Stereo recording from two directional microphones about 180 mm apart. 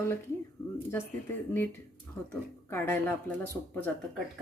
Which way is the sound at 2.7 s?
15° left (ahead or behind).